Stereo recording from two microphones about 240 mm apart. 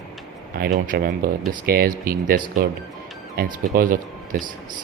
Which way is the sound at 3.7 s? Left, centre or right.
Right.